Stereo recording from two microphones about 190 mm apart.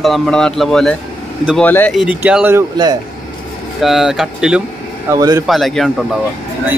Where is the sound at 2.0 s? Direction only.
5° right (ahead or behind).